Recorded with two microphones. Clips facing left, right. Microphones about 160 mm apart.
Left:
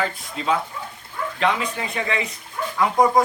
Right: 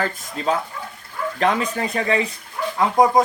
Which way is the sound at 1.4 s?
45° right (ahead or behind).